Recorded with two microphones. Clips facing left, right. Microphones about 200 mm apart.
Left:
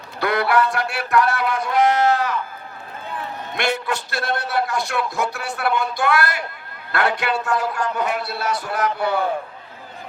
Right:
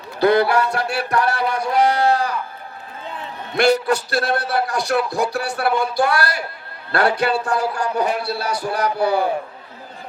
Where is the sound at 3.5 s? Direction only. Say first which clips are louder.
Right 8 dB; 40° right (ahead or behind).